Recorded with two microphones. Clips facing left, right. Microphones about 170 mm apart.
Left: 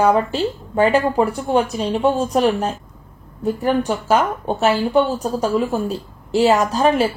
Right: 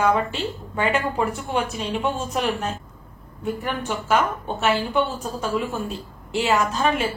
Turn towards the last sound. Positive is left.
turn(degrees=35)  # may be behind; listen again after turning